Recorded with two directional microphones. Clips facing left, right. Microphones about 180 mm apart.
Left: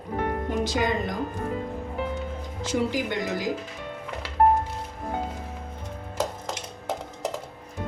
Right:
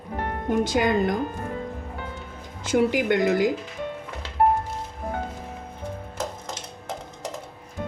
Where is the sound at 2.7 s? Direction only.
60° right (ahead or behind).